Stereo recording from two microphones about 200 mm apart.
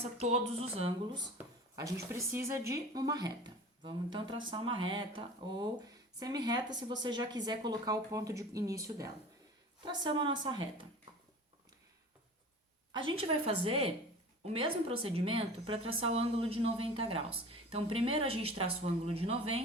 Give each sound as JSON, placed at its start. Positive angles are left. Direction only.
{"t": 0.0, "sound": "speech", "side_deg": -30}
{"t": 1.4, "sound": "speech", "side_deg": -15}
{"t": 13.1, "sound": "a woman's voice", "side_deg": -30}